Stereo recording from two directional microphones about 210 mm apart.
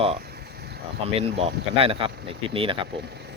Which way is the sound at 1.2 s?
30° right (ahead or behind).